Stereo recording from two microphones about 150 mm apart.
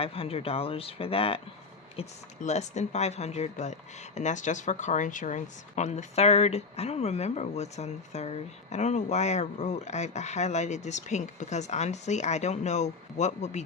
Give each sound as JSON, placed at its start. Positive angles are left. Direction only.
{"t": 0.0, "sound": "speech", "side_deg": 40}
{"t": 2.0, "sound": "speech", "side_deg": 50}